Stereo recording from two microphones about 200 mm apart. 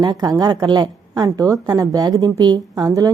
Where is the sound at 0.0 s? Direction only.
20° right (ahead or behind).